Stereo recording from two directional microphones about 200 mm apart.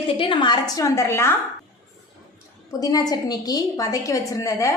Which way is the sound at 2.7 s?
20° left (ahead or behind).